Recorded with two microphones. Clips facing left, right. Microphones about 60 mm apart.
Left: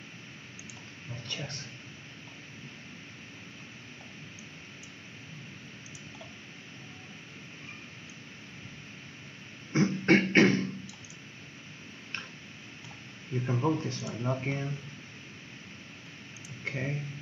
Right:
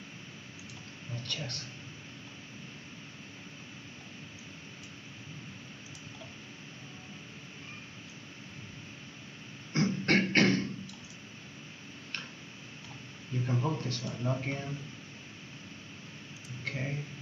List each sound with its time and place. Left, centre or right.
1.2 s speech: centre
9.7 s beatboxing: centre
13.5 s speech: left
16.6 s a sound: left